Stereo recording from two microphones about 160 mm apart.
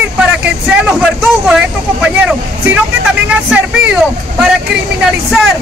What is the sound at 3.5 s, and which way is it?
Speech, 5° right (ahead or behind).